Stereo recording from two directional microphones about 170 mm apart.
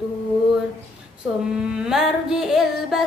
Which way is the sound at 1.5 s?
5° right (ahead or behind).